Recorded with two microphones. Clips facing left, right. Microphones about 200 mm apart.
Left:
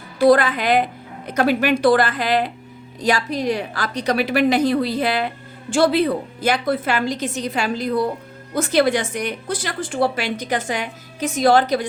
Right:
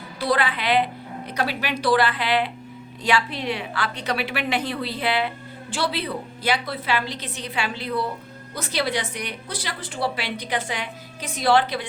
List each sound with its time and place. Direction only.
0.2 s a woman's voice: 45° left (ahead or behind)